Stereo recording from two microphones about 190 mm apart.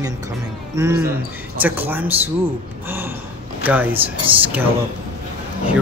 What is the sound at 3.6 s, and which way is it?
Speech, 10° right (ahead or behind).